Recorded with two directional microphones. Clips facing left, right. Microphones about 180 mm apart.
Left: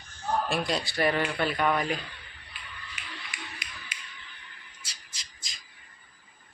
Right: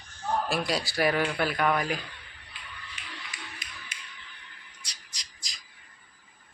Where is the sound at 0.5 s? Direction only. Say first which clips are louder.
Even; 5° right (ahead or behind).